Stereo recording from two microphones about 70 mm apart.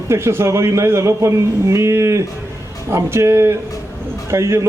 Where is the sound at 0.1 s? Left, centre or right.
Right.